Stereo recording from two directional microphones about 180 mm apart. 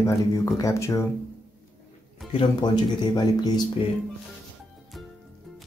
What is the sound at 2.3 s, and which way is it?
Speech, 25° left (ahead or behind).